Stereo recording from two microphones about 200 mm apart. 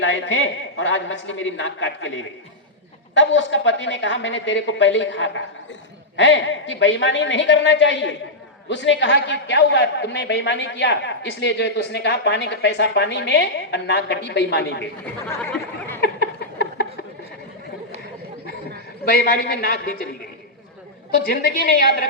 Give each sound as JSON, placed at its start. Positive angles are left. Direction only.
{"t": 0.0, "sound": "a woman's voice", "side_deg": 70}
{"t": 3.2, "sound": "a woman's voice", "side_deg": 70}
{"t": 16.0, "sound": "a sound", "side_deg": 55}
{"t": 19.0, "sound": "a man's voice", "side_deg": 50}
{"t": 21.2, "sound": "a man's voice", "side_deg": 55}